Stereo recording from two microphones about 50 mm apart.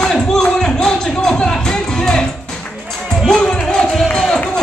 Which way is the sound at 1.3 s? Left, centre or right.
Centre.